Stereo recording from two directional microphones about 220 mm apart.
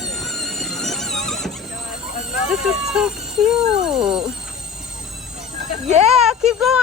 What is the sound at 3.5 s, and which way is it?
Dog, centre (ahead or behind).